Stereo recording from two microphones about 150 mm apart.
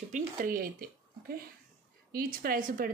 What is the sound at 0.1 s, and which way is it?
Speech, 70° right (ahead or behind).